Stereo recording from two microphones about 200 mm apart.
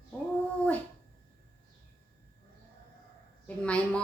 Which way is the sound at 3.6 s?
5° left (ahead or behind).